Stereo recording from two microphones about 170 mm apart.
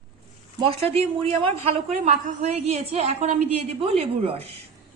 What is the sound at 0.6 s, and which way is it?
A woman's voice, 35° right (ahead or behind).